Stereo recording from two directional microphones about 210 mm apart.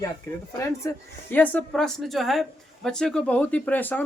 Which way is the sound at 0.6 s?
10° left (ahead or behind).